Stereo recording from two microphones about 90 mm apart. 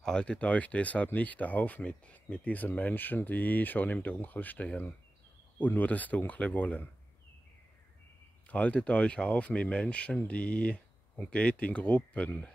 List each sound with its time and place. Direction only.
0.0 s speech: 10° left (ahead or behind)
8.5 s speech: 15° left (ahead or behind)